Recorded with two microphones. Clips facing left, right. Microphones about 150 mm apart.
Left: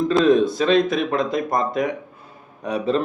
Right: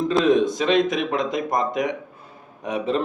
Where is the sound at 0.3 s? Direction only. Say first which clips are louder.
Left 1 dB; 20° right (ahead or behind).